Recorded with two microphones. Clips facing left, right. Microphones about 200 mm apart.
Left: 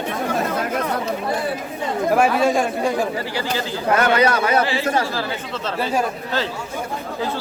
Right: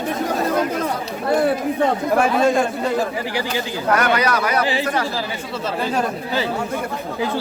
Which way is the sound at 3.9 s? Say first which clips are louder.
Left 2 dB; 25° left (ahead or behind).